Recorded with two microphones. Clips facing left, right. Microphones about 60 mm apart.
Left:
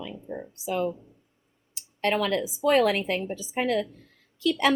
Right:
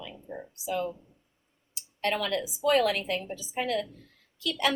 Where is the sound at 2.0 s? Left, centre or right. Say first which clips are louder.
Left 4 dB; left.